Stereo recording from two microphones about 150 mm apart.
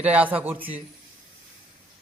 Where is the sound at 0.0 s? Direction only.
10° right (ahead or behind).